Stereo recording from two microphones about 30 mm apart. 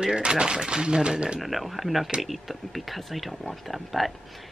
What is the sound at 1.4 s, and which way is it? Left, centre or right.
Speech, centre.